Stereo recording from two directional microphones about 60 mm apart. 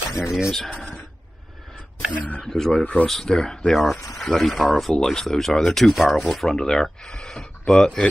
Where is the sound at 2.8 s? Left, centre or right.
Centre.